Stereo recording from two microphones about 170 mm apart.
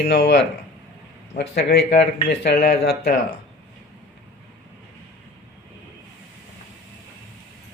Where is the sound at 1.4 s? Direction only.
80° left.